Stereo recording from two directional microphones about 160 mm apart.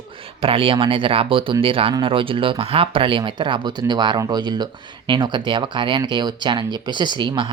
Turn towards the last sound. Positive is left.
turn(degrees=-30)  # may be behind; listen again after turning